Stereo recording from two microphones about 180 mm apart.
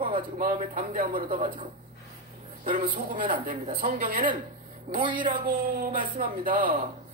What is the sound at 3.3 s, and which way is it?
Speech, 45° right (ahead or behind).